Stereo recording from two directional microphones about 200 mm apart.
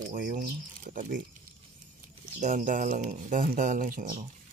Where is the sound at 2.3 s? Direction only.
40° right (ahead or behind).